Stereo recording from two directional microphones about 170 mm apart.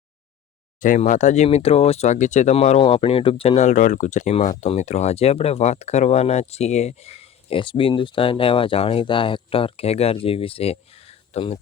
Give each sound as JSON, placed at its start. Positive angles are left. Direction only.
{"t": 0.8, "sound": "speech", "side_deg": 50}